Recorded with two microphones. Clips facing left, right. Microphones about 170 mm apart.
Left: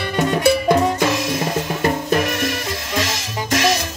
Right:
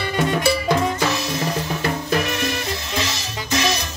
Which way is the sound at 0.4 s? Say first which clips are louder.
Left 7 dB; 50° left (ahead or behind).